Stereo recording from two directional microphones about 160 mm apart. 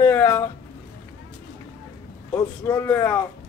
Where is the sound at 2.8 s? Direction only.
10° left (ahead or behind).